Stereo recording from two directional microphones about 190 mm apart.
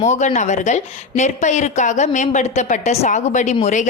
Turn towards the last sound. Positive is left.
turn(degrees=40)  # may be behind; listen again after turning